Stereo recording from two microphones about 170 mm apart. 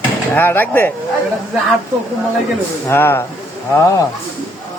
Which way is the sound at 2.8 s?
15° left (ahead or behind).